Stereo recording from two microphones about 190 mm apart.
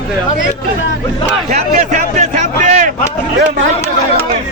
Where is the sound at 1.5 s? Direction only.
40° right (ahead or behind).